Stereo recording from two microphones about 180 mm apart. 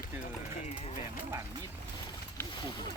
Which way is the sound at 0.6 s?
35° left (ahead or behind).